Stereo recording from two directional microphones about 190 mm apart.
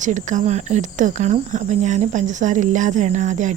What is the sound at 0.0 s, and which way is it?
Speech, 40° right (ahead or behind).